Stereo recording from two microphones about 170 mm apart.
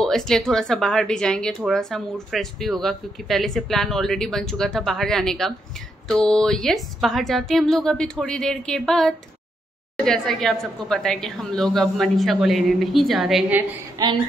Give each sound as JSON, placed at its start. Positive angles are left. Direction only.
{"t": 0.0, "sound": "speech", "side_deg": 5}
{"t": 14.0, "sound": "child singing", "side_deg": -20}